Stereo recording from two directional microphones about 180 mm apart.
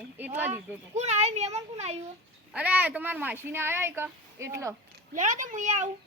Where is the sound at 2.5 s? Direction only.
10° right (ahead or behind).